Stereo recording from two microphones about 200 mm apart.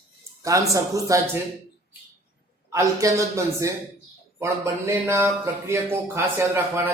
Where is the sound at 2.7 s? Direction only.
15° right (ahead or behind).